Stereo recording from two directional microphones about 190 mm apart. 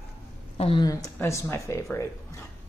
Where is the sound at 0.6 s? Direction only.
25° left (ahead or behind).